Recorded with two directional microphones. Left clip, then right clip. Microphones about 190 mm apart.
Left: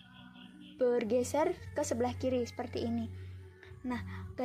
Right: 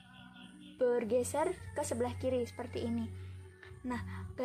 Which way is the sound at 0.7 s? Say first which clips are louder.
Left 1 dB; 20° left (ahead or behind).